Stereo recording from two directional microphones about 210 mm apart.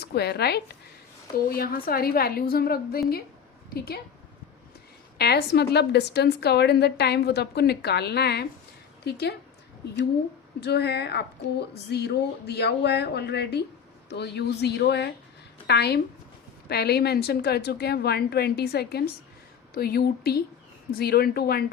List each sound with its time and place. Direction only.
0.0 s a woman's voice: 50° left (ahead or behind)
5.1 s a woman's voice: 50° left (ahead or behind)
10.6 s a woman's voice: 50° left (ahead or behind)